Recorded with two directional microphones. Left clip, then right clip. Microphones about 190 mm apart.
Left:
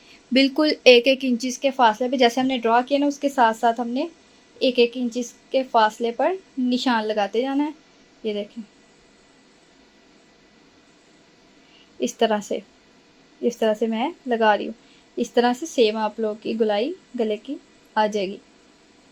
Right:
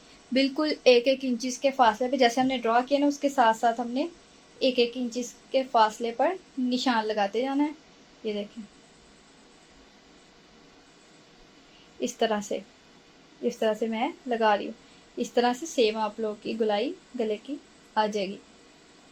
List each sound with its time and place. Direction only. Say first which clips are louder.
0.3 s a woman's voice: left 7 dB; 50° left (ahead or behind)
11.9 s a woman's voice: left 6 dB; 45° left (ahead or behind)